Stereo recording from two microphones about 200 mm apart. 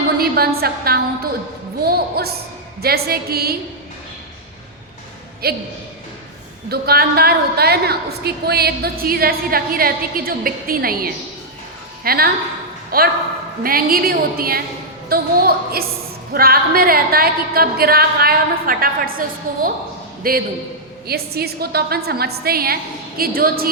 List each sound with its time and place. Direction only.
0.2 s a woman's voice: 50° right (ahead or behind)
5.4 s a woman's voice: 50° right (ahead or behind)
6.7 s a woman's voice: 50° right (ahead or behind)